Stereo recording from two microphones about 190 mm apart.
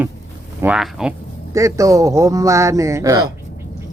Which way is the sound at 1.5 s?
15° right (ahead or behind).